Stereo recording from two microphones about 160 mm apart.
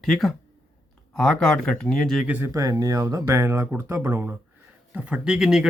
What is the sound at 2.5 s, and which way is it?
Speech, 20° right (ahead or behind).